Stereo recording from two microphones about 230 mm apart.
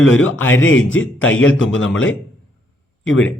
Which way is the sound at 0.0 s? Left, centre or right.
Left.